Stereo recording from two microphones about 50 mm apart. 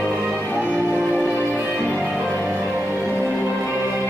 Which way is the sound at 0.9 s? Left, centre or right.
Centre.